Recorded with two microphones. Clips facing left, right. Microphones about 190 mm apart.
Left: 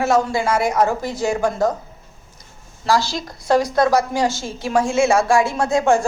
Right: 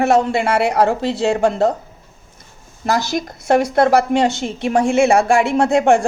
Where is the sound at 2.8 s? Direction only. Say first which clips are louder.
Right 1 dB; 20° right (ahead or behind).